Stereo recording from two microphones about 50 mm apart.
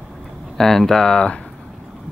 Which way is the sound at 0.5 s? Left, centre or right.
Centre.